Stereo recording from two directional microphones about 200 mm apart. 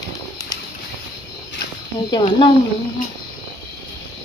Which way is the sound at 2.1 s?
25° left (ahead or behind).